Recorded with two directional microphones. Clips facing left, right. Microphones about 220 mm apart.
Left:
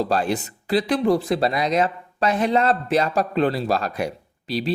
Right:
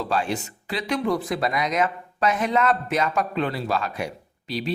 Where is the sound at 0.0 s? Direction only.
35° left (ahead or behind).